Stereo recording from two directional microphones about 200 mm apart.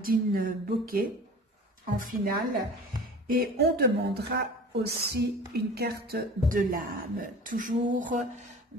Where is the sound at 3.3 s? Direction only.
50° right (ahead or behind).